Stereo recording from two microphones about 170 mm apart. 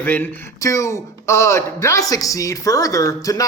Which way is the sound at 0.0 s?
10° left (ahead or behind).